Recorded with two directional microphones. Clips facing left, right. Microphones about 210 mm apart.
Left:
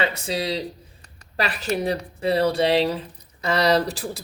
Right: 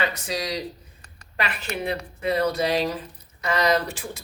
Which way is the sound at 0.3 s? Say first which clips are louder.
Left 3 dB; 25° left (ahead or behind).